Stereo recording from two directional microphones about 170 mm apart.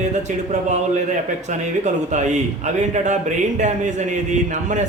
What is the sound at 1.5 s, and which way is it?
Speech, 45° right (ahead or behind).